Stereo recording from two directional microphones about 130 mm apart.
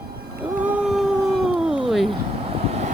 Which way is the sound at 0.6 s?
5° right (ahead or behind).